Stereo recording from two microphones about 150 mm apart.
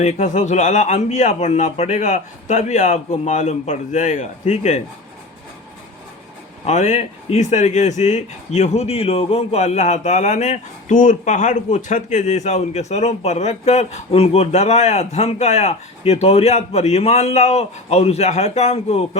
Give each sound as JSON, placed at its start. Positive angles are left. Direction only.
{"t": 0.0, "sound": "speech", "side_deg": 50}
{"t": 6.7, "sound": "speech", "side_deg": 50}